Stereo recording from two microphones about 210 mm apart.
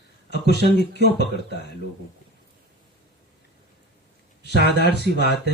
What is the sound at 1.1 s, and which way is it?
Speech, 50° left (ahead or behind).